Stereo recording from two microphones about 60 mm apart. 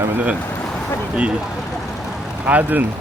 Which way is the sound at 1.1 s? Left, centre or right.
Centre.